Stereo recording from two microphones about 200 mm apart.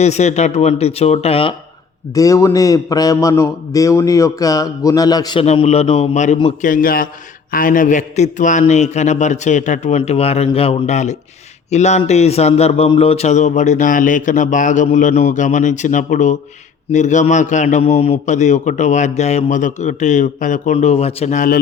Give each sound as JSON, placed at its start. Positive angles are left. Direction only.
{"t": 0.0, "sound": "a man's voice", "side_deg": 35}
{"t": 2.1, "sound": "a man's voice", "side_deg": 15}